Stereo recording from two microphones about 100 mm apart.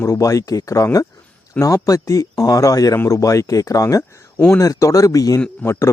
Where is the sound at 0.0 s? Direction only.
30° left (ahead or behind).